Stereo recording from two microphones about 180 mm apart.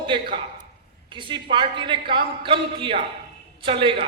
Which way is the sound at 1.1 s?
25° right (ahead or behind).